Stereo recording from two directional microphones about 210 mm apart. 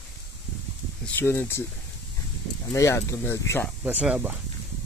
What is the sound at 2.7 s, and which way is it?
Speech, 15° left (ahead or behind).